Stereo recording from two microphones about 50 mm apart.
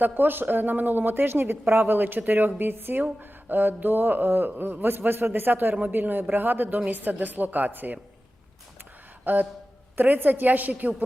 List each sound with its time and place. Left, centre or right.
0.0 s speech: right
9.2 s a sound: right
10.0 s speech: right